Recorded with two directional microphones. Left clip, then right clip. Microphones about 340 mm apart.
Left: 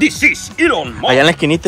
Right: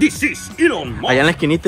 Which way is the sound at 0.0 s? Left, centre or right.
Centre.